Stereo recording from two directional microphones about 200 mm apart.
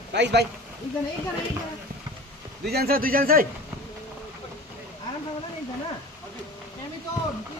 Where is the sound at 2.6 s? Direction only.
50° right (ahead or behind).